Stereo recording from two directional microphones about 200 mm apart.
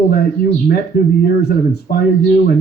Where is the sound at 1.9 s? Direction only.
50° left (ahead or behind).